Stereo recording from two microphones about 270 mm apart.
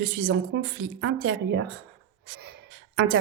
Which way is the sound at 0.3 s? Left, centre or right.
Right.